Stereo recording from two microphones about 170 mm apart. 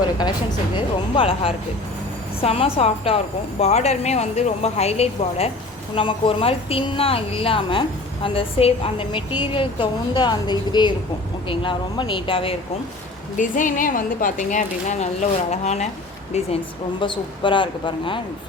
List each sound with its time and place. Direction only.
0.8 s a woman's voice: 30° left (ahead or behind)
13.3 s a woman's voice: 50° left (ahead or behind)
17.0 s speech: 30° left (ahead or behind)